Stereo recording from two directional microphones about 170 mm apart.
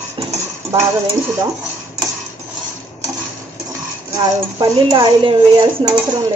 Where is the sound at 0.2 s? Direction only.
30° right (ahead or behind).